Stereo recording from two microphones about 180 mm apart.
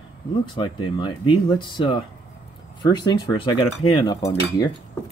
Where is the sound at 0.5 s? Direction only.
25° left (ahead or behind).